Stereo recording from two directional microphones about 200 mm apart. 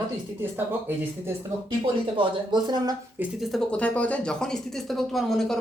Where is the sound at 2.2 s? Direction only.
20° right (ahead or behind).